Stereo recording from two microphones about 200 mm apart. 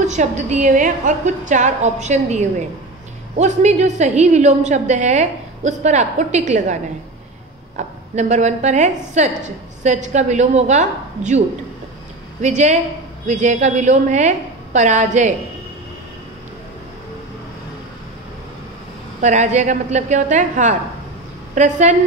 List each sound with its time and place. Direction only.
0.0 s a woman's voice: 35° right (ahead or behind)
19.2 s a woman's voice: 35° right (ahead or behind)